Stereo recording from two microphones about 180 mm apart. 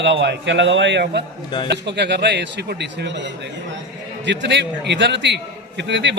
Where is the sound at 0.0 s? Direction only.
85° right.